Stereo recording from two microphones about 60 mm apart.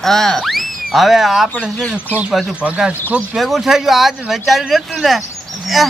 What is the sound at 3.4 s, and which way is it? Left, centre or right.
Speech, centre.